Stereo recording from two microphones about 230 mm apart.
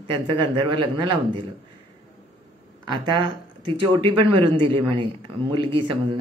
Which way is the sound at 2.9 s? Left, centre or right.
Centre.